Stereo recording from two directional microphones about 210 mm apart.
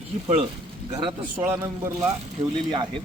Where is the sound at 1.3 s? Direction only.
10° right (ahead or behind).